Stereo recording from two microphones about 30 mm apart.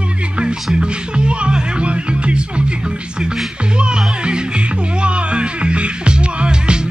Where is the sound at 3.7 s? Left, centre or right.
Right.